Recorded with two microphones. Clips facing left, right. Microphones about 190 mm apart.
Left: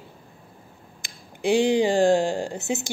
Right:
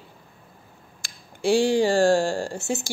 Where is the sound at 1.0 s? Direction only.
20° left (ahead or behind).